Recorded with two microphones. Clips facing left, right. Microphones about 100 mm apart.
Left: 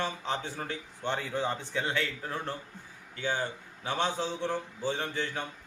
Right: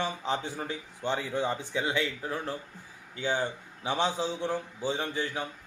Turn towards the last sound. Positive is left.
turn(degrees=-10)  # may be behind; listen again after turning